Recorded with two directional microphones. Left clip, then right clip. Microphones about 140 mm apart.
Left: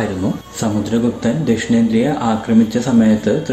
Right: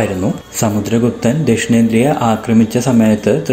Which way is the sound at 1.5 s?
30° right (ahead or behind).